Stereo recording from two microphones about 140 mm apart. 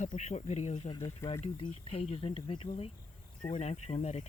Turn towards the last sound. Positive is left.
turn(degrees=55)  # may be behind; listen again after turning